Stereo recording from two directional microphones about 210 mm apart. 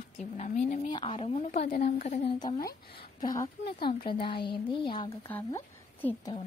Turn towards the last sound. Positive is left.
turn(degrees=10)  # may be behind; listen again after turning